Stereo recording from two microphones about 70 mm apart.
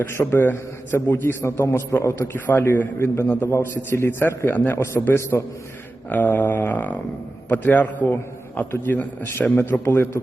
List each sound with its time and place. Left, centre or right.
0.1 s a man's voice: left